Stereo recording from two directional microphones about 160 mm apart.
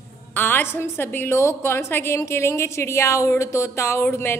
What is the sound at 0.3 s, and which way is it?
A woman's voice, 10° left (ahead or behind).